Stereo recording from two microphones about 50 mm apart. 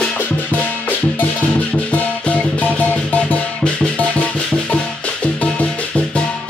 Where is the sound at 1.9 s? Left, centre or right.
Left.